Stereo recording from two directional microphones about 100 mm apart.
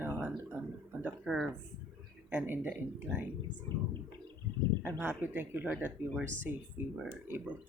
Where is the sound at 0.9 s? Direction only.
20° right (ahead or behind).